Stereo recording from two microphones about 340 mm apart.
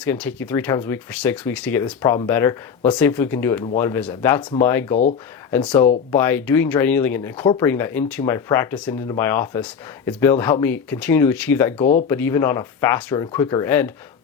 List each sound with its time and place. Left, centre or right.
0.0 s speech: centre